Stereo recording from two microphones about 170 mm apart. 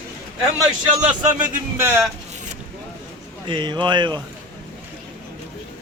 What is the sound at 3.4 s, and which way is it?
Speech, 25° right (ahead or behind).